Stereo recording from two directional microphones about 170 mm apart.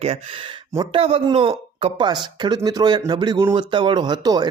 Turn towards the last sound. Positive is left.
turn(degrees=-25)  # may be behind; listen again after turning